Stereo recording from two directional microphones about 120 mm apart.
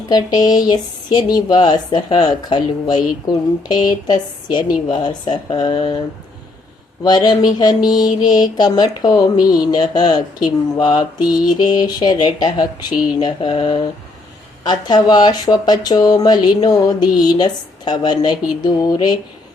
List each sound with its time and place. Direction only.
0.1 s speech: 35° left (ahead or behind)
7.0 s speech: 35° left (ahead or behind)
13.1 s mantra: 40° left (ahead or behind)
14.6 s speech: 35° left (ahead or behind)